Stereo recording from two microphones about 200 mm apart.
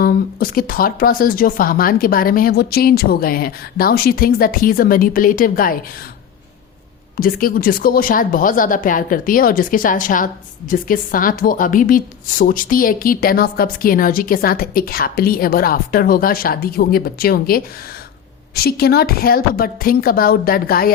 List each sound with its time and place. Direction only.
0.0 s a woman's voice: 45° left (ahead or behind)
7.2 s a woman's voice: 45° left (ahead or behind)